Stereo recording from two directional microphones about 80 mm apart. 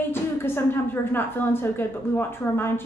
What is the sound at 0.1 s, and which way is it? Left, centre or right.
A woman's voice, left.